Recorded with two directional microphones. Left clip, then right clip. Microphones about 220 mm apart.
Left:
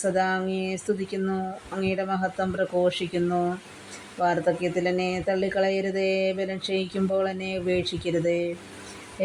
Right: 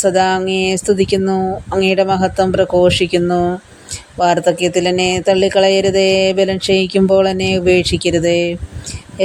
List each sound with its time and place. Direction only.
0.0 s speech: 40° right (ahead or behind)